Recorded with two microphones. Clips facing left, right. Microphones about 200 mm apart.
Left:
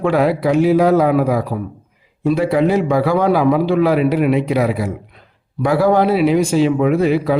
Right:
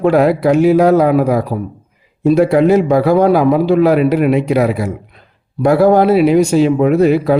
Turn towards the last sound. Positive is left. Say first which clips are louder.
# right 4 dB
turn(degrees=-50)  # may be behind; listen again after turning